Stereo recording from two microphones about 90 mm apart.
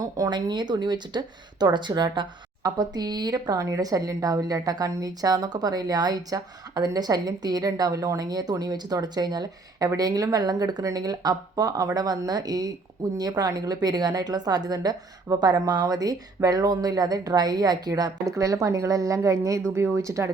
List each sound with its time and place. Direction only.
0.0 s a woman's voice: 50° right (ahead or behind)
18.3 s a woman's voice: 35° right (ahead or behind)